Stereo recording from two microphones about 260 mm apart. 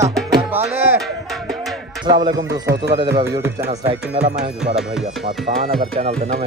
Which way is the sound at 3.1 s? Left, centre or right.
Centre.